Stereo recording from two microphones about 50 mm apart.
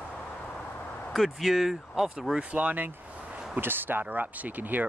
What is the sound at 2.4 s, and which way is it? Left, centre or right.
Speech, right.